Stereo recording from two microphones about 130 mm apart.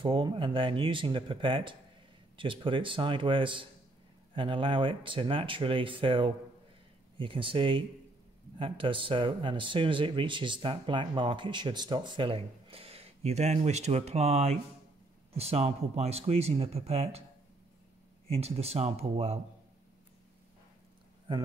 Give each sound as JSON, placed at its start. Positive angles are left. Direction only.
{"t": 0.0, "sound": "speech", "side_deg": -40}
{"t": 18.3, "sound": "speech", "side_deg": -50}